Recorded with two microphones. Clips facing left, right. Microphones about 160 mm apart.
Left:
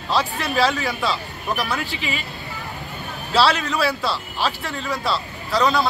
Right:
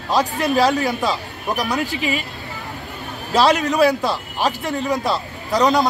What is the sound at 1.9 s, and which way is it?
Speech, 50° right (ahead or behind).